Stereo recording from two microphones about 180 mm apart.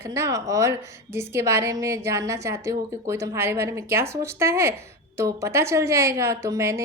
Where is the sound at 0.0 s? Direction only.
15° right (ahead or behind).